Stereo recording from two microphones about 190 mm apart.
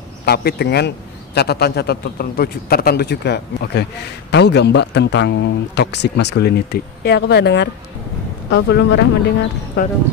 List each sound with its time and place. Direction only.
0.2 s a man's voice: 55° left (ahead or behind)
9.8 s speech: 55° left (ahead or behind)